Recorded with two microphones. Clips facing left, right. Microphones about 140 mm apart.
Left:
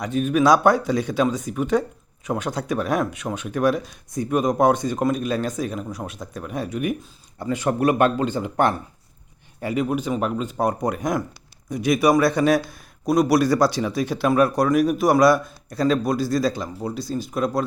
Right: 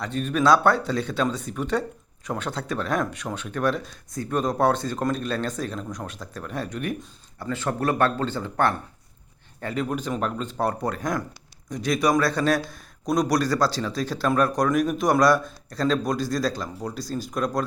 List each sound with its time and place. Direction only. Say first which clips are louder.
0.0 s a man's voice: left 4 dB; 10° left (ahead or behind)